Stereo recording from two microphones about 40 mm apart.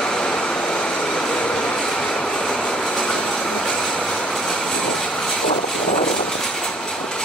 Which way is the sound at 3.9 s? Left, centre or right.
Left.